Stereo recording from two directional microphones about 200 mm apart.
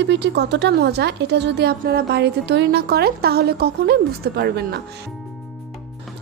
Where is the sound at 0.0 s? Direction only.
60° right (ahead or behind).